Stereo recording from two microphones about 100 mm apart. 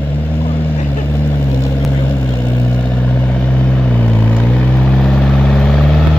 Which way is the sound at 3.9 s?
15° left (ahead or behind).